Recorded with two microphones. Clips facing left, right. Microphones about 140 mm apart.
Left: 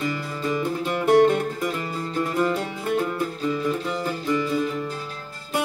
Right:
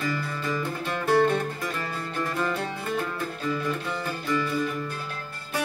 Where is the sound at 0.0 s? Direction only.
20° left (ahead or behind).